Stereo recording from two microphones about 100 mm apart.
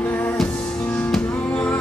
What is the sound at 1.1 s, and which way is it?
Music, 10° left (ahead or behind).